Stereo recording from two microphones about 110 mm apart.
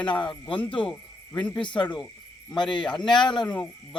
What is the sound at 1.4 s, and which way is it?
Speech, 10° left (ahead or behind).